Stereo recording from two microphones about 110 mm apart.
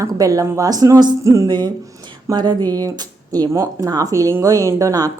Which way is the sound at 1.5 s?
40° right (ahead or behind).